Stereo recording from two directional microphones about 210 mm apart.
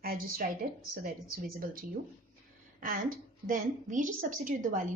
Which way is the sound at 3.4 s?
40° right (ahead or behind).